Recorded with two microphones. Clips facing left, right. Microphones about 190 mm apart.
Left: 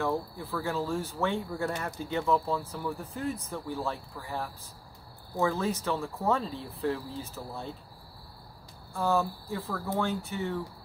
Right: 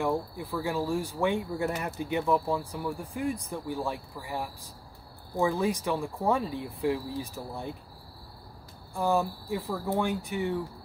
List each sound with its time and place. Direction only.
0.0 s speech: 15° right (ahead or behind)
8.9 s speech: 15° right (ahead or behind)